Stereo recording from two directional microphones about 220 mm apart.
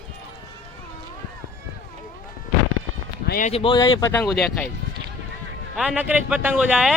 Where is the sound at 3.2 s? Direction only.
45° left (ahead or behind).